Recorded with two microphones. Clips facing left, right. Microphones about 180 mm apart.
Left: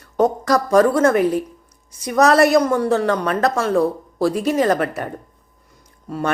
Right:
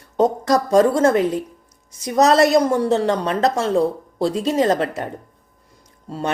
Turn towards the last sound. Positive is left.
turn(degrees=-30)  # may be behind; listen again after turning